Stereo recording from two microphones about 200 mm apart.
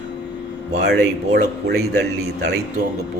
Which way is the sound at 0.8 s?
55° right (ahead or behind).